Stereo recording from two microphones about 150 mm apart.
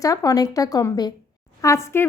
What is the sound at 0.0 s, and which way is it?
A woman's voice, 25° left (ahead or behind).